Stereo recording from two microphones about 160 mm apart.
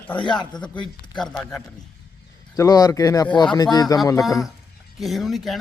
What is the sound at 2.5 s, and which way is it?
A man's voice, 20° left (ahead or behind).